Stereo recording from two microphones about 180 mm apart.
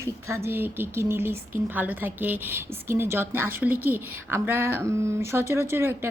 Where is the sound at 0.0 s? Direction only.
15° right (ahead or behind).